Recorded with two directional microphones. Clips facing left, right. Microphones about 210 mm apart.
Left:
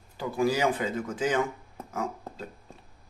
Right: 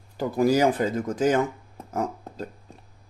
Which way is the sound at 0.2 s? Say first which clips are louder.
Right 5 dB; 40° right (ahead or behind).